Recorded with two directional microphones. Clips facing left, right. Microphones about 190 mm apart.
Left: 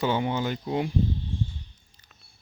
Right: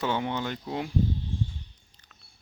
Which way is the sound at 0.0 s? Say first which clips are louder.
Left 3 dB; 5° left (ahead or behind).